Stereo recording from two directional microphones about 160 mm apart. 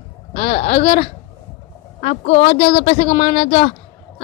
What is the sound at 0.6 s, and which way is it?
A man's voice, 35° left (ahead or behind).